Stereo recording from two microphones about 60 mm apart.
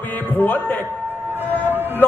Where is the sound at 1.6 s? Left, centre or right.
Right.